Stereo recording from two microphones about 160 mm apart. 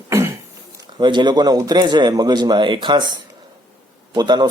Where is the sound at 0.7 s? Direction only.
30° right (ahead or behind).